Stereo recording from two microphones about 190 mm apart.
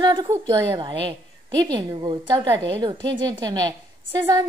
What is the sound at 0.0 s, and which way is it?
A woman's voice, 20° right (ahead or behind).